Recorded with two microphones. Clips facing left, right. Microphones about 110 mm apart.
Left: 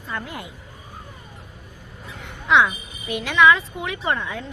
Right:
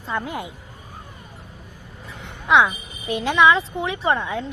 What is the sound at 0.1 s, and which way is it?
Speech, 20° right (ahead or behind).